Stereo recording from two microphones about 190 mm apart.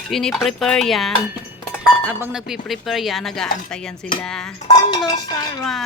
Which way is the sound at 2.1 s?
10° right (ahead or behind).